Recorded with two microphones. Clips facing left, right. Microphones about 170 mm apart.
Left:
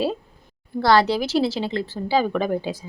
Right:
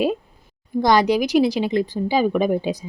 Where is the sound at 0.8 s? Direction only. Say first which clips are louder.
Right 1 dB; 15° right (ahead or behind).